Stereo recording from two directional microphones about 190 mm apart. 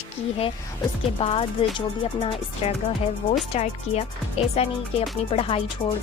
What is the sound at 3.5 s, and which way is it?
Speech, 35° left (ahead or behind).